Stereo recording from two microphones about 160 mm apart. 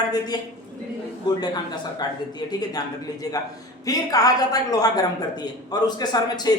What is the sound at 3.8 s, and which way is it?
A woman's voice, 20° left (ahead or behind).